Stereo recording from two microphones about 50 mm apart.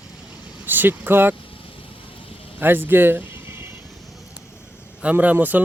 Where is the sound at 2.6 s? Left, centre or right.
Right.